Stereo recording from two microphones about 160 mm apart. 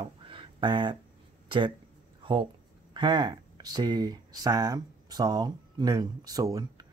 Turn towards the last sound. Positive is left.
turn(degrees=-25)  # may be behind; listen again after turning